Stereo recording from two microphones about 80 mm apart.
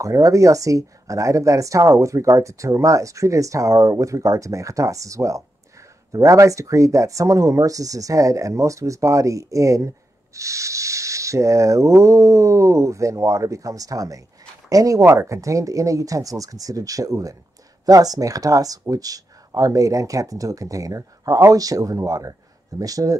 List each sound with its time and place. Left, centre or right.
0.0 s speech: right